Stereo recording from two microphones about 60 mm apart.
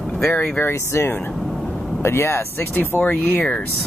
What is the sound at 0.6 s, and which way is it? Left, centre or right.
Speech, left.